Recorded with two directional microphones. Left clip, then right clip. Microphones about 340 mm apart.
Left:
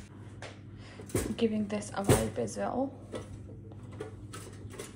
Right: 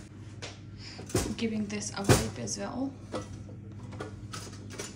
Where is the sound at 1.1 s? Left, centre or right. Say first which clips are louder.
Left 1 dB; centre.